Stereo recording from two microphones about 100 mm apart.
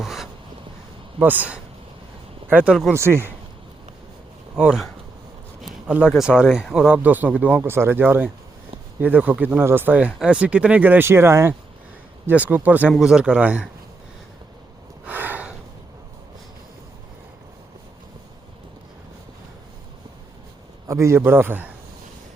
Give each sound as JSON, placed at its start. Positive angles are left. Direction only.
{"t": 0.0, "sound": "a sound", "side_deg": -5}
{"t": 1.2, "sound": "speech", "side_deg": -15}
{"t": 2.9, "sound": "a man's voice", "side_deg": -25}
{"t": 4.5, "sound": "speech", "side_deg": -5}
{"t": 6.1, "sound": "speech", "side_deg": -5}
{"t": 12.9, "sound": "speech", "side_deg": -5}
{"t": 15.0, "sound": "a sound", "side_deg": -15}
{"t": 20.8, "sound": "a man's voice", "side_deg": -30}